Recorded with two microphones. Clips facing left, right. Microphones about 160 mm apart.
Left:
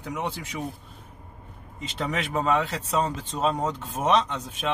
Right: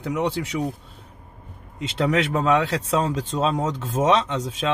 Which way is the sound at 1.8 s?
90° right.